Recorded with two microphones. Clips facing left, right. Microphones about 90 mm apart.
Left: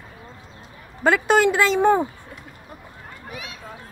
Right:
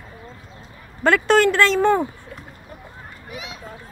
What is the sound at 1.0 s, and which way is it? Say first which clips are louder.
Speech: right 1 dB; 5° left (ahead or behind).